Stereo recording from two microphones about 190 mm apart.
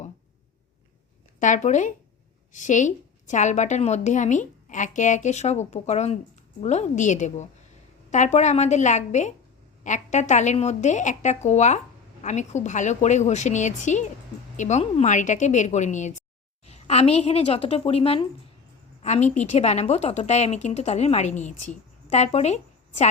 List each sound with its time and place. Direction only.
1.4 s a woman's voice: 40° left (ahead or behind)